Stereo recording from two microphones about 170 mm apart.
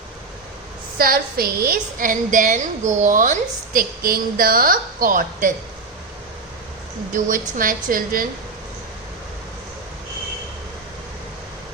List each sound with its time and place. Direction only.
0.9 s a woman's voice: 60° right (ahead or behind)
7.3 s a woman's voice: 55° right (ahead or behind)